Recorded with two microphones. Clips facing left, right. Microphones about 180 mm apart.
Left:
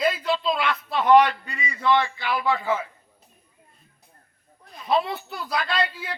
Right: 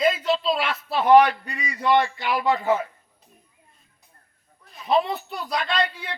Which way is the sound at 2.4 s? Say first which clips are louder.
Right 3 dB; 20° right (ahead or behind).